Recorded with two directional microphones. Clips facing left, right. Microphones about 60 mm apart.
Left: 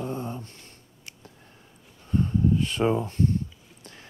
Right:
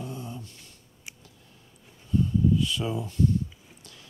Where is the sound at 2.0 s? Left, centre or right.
Left.